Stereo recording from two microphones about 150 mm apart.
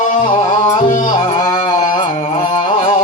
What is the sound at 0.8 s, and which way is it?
Carnatic music, 55° left (ahead or behind).